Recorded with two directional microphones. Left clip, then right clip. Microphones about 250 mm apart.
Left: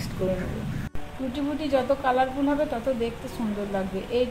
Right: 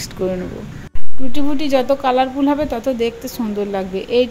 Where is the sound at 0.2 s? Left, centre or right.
Right.